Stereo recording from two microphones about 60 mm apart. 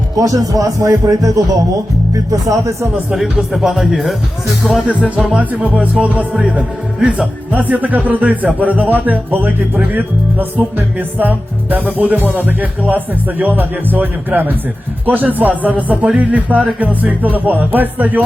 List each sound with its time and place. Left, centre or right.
0.2 s speech: right
3.5 s speech: centre
4.9 s music: right
13.4 s speech: right
15.0 s music: right